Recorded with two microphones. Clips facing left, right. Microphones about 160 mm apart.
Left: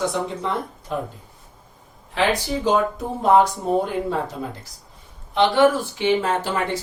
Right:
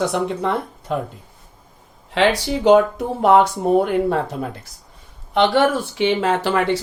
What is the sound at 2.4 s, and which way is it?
Speech, 75° right (ahead or behind).